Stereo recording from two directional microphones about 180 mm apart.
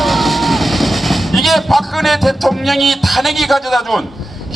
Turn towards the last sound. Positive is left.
turn(degrees=0)  # may be behind; listen again after turning